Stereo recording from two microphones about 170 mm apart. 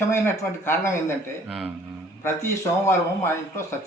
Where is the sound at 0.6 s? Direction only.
15° left (ahead or behind).